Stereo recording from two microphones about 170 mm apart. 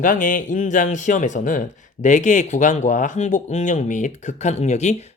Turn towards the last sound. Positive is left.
turn(degrees=40)  # may be behind; listen again after turning